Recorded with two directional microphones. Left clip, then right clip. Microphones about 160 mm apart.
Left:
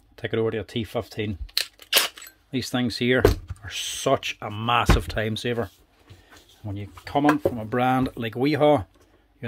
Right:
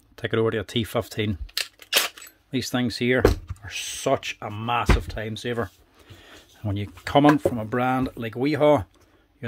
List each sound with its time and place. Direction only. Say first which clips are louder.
0.1 s speech: right 2 dB; 15° right (ahead or behind)
1.6 s a sound: left 1 dB; 10° left (ahead or behind)
2.1 s speech: right 1 dB; 10° right (ahead or behind)
4.6 s speech: left 3 dB; 20° left (ahead or behind)
6.6 s speech: right 6 dB; 40° right (ahead or behind)
7.7 s speech: left 1 dB; 5° left (ahead or behind)